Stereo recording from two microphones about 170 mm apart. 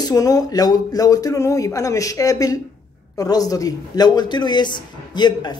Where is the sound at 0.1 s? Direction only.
20° left (ahead or behind).